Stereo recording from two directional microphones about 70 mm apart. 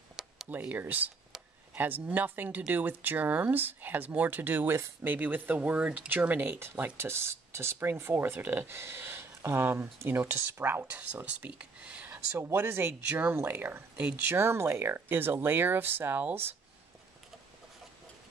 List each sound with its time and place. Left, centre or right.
0.1 s a sound: centre
0.5 s speech: right
10.9 s speech: centre
12.4 s speech: right